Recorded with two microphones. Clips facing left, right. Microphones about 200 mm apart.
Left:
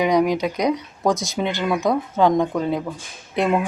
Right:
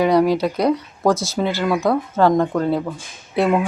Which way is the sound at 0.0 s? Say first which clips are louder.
Right 3 dB; 15° left (ahead or behind).